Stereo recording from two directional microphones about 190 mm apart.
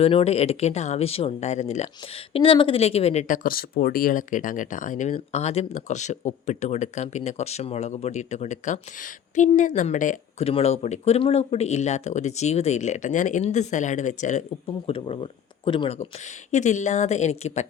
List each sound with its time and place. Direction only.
0.0 s speech: 30° left (ahead or behind)
14.8 s speech: 30° left (ahead or behind)